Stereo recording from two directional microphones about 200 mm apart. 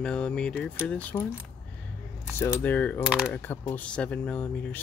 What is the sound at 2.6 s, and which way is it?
Speech, 10° left (ahead or behind).